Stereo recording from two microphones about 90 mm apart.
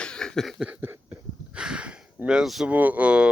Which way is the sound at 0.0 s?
10° left (ahead or behind).